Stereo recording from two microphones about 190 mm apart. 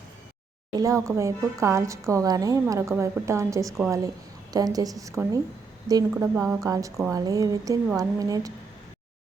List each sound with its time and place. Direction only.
0.8 s a woman's voice: 15° right (ahead or behind)